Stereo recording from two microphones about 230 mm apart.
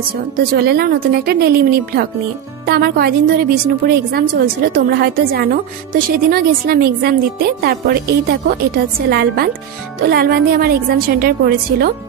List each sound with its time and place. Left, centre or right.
0.4 s a woman's voice: right